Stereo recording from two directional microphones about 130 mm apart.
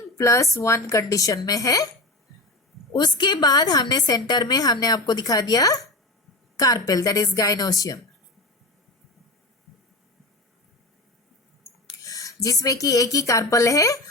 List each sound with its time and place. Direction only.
0.2 s speech: 25° left (ahead or behind)
2.9 s a woman's voice: 35° left (ahead or behind)
11.9 s speech: 25° left (ahead or behind)